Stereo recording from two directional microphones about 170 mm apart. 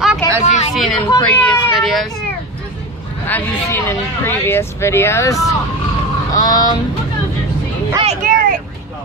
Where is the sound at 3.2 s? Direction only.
10° left (ahead or behind).